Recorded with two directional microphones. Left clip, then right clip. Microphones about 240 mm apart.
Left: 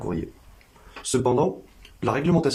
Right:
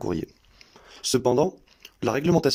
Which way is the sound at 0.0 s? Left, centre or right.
Right.